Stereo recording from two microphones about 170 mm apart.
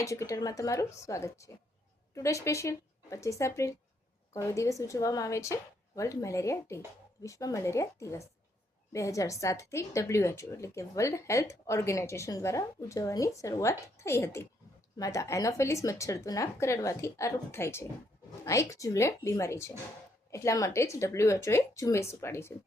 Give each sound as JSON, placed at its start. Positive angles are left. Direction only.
{"t": 0.0, "sound": "a woman's voice", "side_deg": 20}